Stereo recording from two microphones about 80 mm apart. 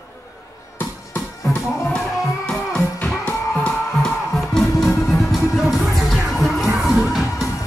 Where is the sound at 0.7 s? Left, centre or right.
Left.